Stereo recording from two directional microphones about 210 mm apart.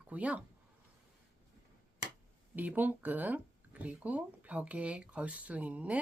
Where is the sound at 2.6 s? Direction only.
10° right (ahead or behind).